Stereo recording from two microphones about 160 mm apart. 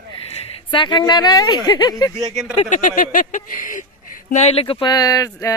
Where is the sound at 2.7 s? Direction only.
55° left (ahead or behind).